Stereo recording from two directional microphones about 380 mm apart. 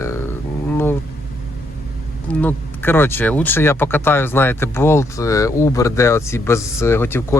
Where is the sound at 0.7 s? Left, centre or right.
Centre.